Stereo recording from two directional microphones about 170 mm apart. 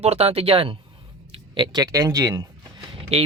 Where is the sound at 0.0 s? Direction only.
35° right (ahead or behind); by 2.5 s 20° right (ahead or behind).